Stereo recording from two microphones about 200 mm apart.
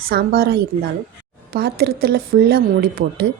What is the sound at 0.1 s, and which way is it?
A woman's voice, 50° right (ahead or behind).